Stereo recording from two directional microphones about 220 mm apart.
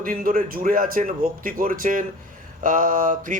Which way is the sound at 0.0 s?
40° right (ahead or behind).